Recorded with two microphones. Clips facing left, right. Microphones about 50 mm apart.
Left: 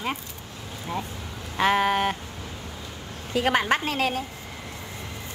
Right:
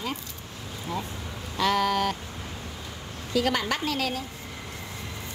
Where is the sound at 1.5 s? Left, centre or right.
Left.